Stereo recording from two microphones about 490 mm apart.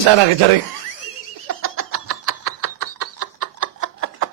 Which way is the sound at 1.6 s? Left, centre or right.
Right.